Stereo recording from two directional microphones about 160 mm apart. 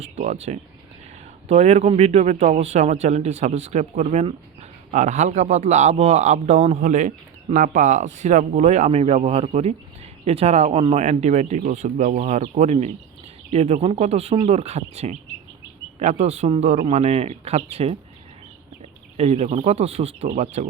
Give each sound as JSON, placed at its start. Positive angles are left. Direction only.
{"t": 0.0, "sound": "speech", "side_deg": -45}
{"t": 19.1, "sound": "speech", "side_deg": -40}